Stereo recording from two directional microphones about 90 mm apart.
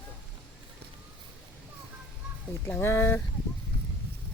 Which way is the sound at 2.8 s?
25° left (ahead or behind).